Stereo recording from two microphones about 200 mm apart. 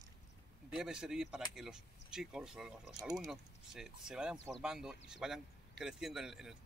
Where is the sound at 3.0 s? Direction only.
20° right (ahead or behind).